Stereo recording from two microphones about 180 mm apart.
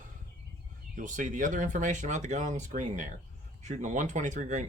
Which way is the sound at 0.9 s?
45° right (ahead or behind).